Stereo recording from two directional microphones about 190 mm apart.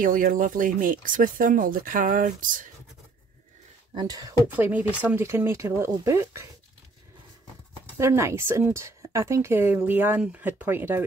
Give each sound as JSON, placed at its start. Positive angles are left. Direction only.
{"t": 0.0, "sound": "speech", "side_deg": -45}
{"t": 3.9, "sound": "speech", "side_deg": -20}
{"t": 8.0, "sound": "speech", "side_deg": -15}